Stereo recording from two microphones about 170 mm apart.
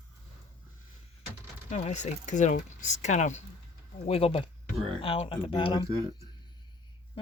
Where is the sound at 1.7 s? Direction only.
45° left (ahead or behind).